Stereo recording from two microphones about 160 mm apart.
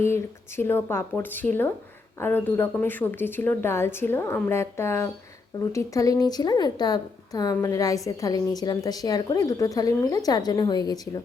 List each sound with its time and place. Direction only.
0.0 s a woman's voice: 15° left (ahead or behind)